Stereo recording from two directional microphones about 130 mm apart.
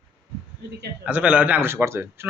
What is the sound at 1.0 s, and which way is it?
A man's voice, 10° right (ahead or behind).